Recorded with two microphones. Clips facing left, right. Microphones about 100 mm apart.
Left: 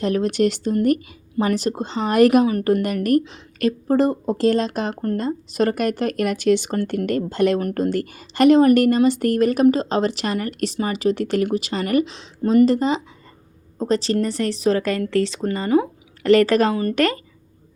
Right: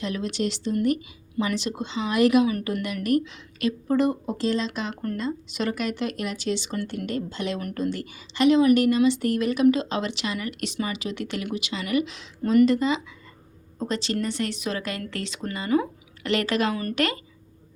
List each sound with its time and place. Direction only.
0.0 s speech: 50° left (ahead or behind)
12.0 s speech: 30° left (ahead or behind)